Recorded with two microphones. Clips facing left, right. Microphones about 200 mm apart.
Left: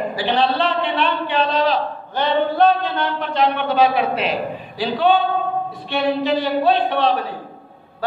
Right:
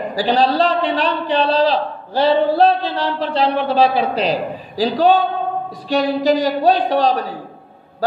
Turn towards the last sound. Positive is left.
turn(degrees=-40)  # may be behind; listen again after turning